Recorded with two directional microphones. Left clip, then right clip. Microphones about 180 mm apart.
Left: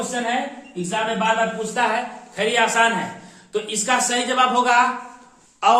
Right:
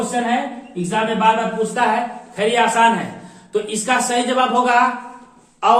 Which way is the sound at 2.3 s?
15° left (ahead or behind).